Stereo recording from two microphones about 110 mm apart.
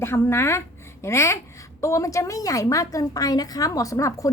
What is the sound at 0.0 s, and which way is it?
A woman's voice, 25° left (ahead or behind).